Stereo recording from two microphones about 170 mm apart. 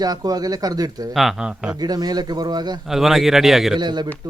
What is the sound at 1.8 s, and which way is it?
Speech, 25° right (ahead or behind).